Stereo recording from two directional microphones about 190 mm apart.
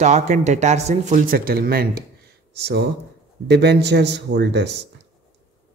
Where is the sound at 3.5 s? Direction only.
60° right (ahead or behind).